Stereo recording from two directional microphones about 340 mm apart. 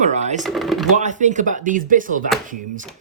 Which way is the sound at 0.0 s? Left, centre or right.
Right.